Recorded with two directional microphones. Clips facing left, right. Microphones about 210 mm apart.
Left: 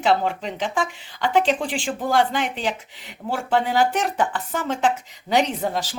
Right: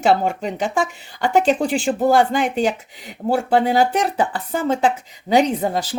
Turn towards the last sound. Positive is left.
turn(degrees=-40)  # may be behind; listen again after turning